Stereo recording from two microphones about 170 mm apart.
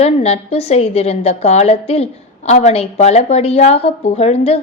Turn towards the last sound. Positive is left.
turn(degrees=35)  # may be behind; listen again after turning